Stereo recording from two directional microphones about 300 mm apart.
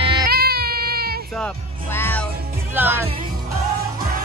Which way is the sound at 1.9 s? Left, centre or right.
Centre.